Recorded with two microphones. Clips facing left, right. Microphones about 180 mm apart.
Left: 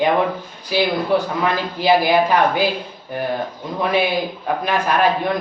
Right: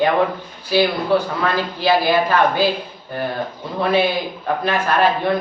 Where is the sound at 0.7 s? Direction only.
15° left (ahead or behind).